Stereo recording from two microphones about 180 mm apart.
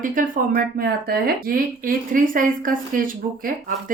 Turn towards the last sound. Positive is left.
turn(degrees=-50)  # may be behind; listen again after turning